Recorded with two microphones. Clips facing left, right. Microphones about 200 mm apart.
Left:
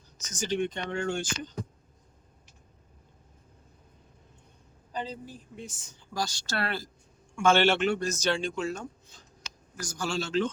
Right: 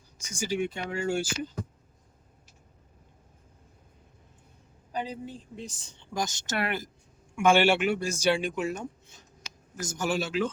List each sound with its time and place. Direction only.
0.2 s speech: 10° right (ahead or behind)
4.9 s speech: 10° right (ahead or behind)
5.2 s speech: 30° right (ahead or behind); by 10.5 s 10° right (ahead or behind)